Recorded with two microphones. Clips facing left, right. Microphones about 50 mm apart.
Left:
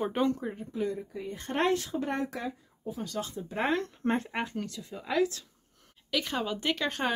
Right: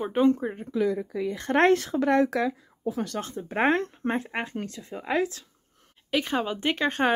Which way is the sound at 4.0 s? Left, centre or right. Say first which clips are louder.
Right 1 dB; centre.